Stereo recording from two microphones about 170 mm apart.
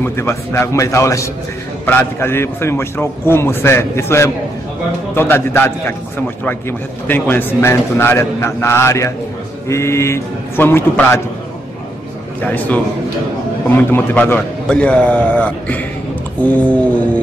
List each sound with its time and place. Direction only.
0.0 s a man's voice: 15° left (ahead or behind)
7.1 s a man's voice: 10° left (ahead or behind)
12.4 s a man's voice: 10° left (ahead or behind)